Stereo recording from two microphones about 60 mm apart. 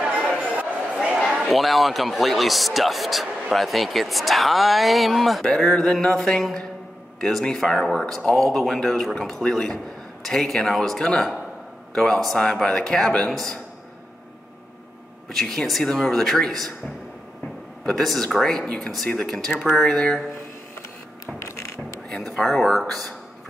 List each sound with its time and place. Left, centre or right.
0.0 s a sound: centre
1.5 s a man's voice: centre
15.2 s a man's voice: centre
17.8 s speech: centre
21.4 s a sound: left
22.2 s a man's voice: centre